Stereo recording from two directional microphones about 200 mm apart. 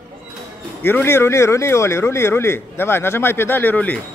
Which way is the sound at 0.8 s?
10° left (ahead or behind).